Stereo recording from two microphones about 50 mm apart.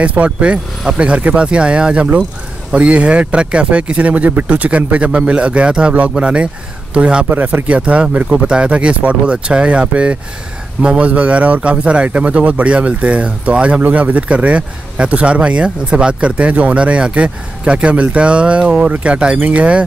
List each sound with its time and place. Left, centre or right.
0.0 s speech: right
7.2 s speech: right